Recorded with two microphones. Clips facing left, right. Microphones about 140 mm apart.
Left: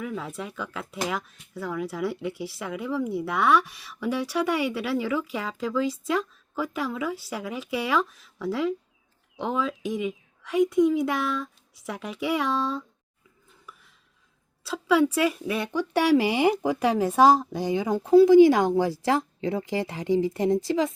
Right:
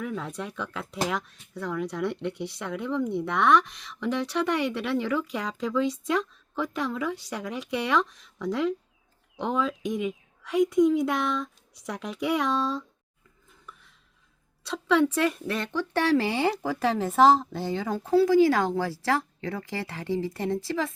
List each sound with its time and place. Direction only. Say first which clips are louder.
0.0 s speech: even; centre (ahead or behind)
13.7 s dishes: even; 5° left (ahead or behind)
14.6 s speech: left 1 dB; 5° left (ahead or behind)